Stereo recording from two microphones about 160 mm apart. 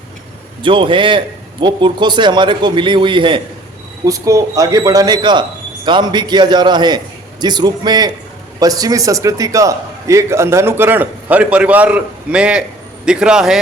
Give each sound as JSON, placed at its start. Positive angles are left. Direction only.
{"t": 0.6, "sound": "a man's voice", "side_deg": -30}
{"t": 4.0, "sound": "a man's voice", "side_deg": -20}